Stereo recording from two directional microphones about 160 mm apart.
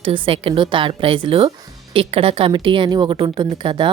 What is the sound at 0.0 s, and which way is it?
A woman's voice, 35° right (ahead or behind).